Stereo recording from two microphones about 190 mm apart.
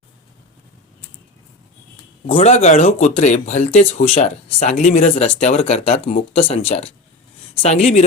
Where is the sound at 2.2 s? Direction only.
30° left (ahead or behind).